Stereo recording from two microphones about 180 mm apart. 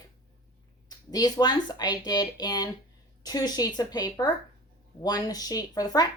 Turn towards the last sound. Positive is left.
turn(degrees=20)  # may be behind; listen again after turning